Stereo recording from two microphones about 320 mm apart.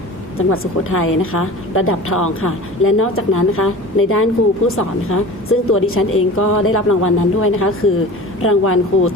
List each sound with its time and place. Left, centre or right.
0.3 s a woman's voice: left